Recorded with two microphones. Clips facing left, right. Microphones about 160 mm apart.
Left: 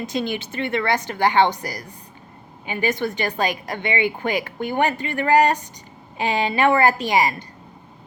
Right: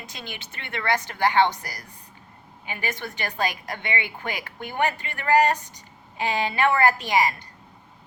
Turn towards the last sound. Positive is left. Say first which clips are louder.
# left 3 dB
turn(degrees=20)  # may be behind; listen again after turning